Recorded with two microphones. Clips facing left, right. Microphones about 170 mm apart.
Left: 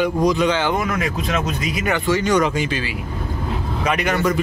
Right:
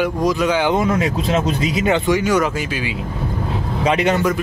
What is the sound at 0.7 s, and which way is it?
Speech, 25° right (ahead or behind).